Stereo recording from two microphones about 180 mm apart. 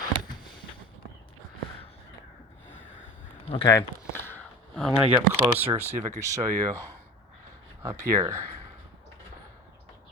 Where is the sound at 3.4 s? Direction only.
25° left (ahead or behind).